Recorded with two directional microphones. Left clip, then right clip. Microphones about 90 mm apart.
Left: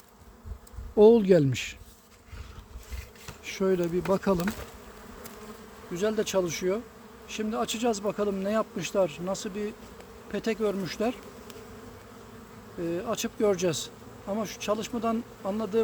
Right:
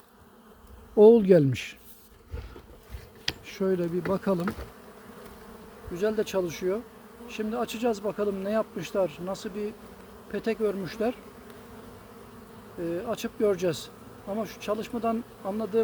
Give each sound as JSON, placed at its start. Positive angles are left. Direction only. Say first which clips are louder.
{"t": 0.9, "sound": "speech", "louder": "right 2 dB", "side_deg": -25}
{"t": 3.4, "sound": "speech", "louder": "left 2 dB", "side_deg": 15}
{"t": 5.9, "sound": "speech", "louder": "even", "side_deg": 10}
{"t": 7.3, "sound": "insect", "louder": "left 1 dB", "side_deg": 5}
{"t": 10.3, "sound": "speech", "louder": "right 1 dB", "side_deg": 5}
{"t": 12.8, "sound": "insect", "louder": "even", "side_deg": 10}